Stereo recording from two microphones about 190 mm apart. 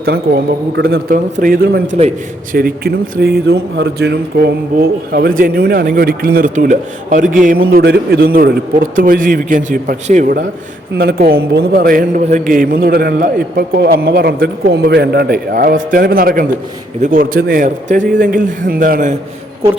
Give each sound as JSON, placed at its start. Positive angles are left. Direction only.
{"t": 0.0, "sound": "a man's voice", "side_deg": -60}
{"t": 2.0, "sound": "a man's voice", "side_deg": -35}
{"t": 2.6, "sound": "a man's voice", "side_deg": -50}
{"t": 7.7, "sound": "a man's voice", "side_deg": -55}
{"t": 10.9, "sound": "a man's voice", "side_deg": -55}